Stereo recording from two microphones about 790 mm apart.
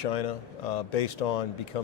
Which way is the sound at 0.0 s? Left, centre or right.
Left.